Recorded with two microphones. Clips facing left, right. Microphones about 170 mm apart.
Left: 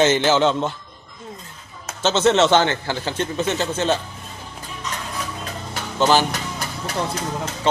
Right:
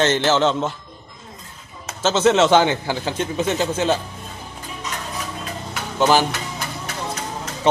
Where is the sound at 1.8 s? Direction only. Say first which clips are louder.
Right 1 dB; 5° right (ahead or behind).